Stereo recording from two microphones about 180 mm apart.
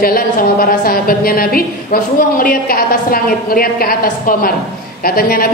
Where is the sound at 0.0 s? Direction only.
50° left (ahead or behind).